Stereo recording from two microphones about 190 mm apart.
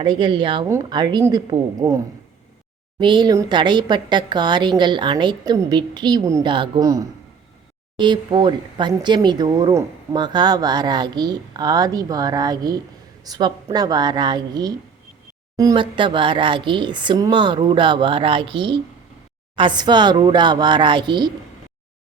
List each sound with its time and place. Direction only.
0.0 s speech: 25° right (ahead or behind)
3.0 s speech: 25° right (ahead or behind)